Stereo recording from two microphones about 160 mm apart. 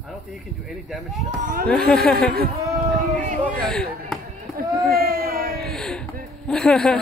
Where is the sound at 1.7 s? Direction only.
5° left (ahead or behind).